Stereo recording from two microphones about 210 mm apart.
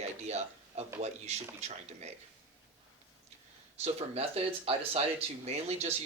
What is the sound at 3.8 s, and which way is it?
Speech, 30° right (ahead or behind).